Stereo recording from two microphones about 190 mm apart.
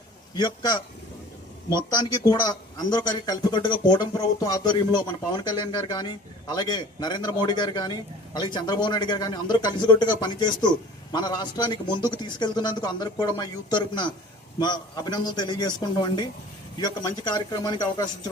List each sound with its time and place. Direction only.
0.3 s a man's voice: 20° left (ahead or behind)